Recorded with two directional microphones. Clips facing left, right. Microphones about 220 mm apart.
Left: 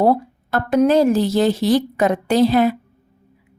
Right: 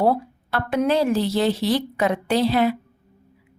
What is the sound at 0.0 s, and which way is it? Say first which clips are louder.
A woman's voice: left 4 dB; 45° left (ahead or behind).